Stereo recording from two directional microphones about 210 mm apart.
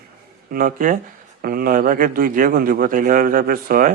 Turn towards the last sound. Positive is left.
turn(degrees=-45)  # may be behind; listen again after turning